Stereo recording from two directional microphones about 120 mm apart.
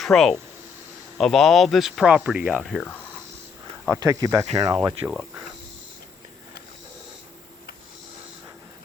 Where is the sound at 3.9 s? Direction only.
30° right (ahead or behind).